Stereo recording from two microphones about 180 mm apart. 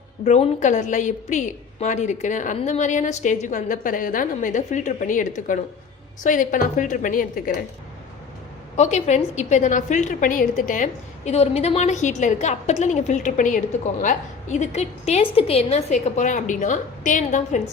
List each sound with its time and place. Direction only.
0.3 s a woman's voice: 40° left (ahead or behind)
8.7 s a woman's voice: 40° left (ahead or behind)
11.3 s a woman's voice: 35° left (ahead or behind)